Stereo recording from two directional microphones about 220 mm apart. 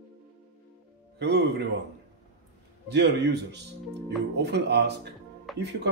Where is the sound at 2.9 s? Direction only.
50° right (ahead or behind).